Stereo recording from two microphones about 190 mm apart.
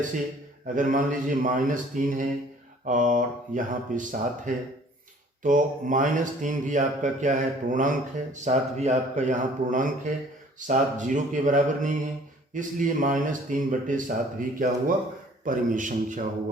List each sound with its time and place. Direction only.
0.8 s speech: 45° right (ahead or behind)